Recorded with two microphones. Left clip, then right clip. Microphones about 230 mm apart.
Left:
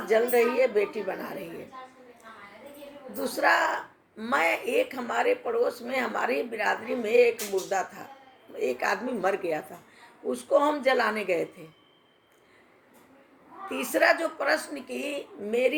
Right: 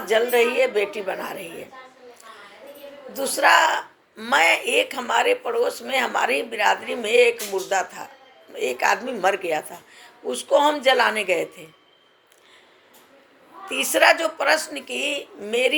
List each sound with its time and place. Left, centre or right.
0.1 s speech: centre
0.4 s speech: right
0.9 s speech: centre
1.2 s speech: right
3.1 s speech: centre
13.7 s speech: centre